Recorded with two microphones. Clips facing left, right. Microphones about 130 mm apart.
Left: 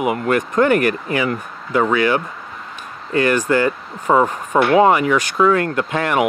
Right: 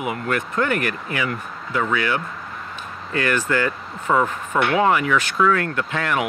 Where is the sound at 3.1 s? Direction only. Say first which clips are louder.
Left 6 dB; 25° left (ahead or behind).